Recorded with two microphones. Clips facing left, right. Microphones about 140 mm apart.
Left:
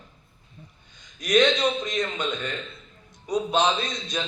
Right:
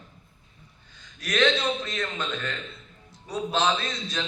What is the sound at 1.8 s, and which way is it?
A man's voice, 20° left (ahead or behind).